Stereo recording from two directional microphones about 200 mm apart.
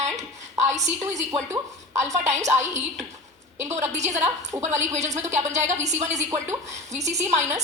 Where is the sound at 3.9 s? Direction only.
35° right (ahead or behind).